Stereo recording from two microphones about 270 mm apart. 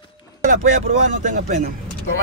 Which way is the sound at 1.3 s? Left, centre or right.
Right.